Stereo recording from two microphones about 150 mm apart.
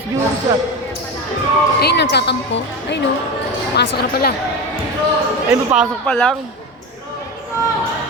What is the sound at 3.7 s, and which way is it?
Speech, 90° left.